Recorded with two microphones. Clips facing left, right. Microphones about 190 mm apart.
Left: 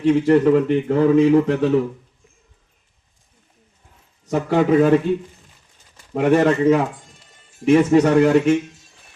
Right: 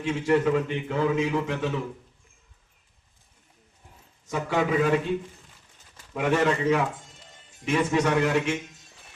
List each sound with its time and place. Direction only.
0.2 s speech: 45° left (ahead or behind)
4.3 s speech: 45° left (ahead or behind)
6.1 s speech: 45° left (ahead or behind)